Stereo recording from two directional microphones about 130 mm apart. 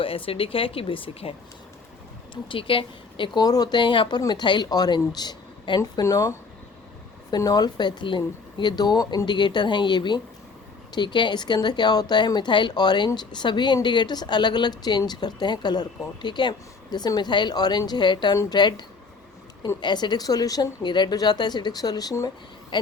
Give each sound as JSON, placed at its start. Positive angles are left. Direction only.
{"t": 0.0, "sound": "speech", "side_deg": 45}
{"t": 22.7, "sound": "speech", "side_deg": 40}